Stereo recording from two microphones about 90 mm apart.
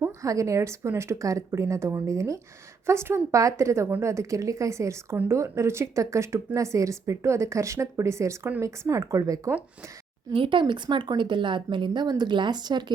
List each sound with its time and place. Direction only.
0.2 s speech: 35° right (ahead or behind)
10.3 s speech: 70° right (ahead or behind); by 12.8 s 55° right (ahead or behind)